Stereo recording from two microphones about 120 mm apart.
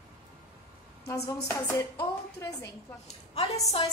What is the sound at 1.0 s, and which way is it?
Speech, 25° left (ahead or behind).